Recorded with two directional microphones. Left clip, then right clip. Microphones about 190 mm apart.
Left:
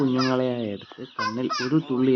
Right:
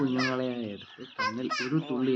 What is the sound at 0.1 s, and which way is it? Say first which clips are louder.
Speech: left 6 dB; 25° left (ahead or behind).